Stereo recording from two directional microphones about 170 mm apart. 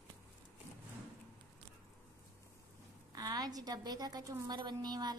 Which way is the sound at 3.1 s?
20° right (ahead or behind).